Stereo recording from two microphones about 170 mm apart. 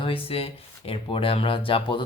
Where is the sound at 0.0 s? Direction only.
35° left (ahead or behind).